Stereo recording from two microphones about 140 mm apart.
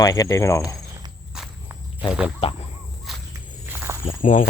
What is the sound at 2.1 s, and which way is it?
Speech, 5° right (ahead or behind).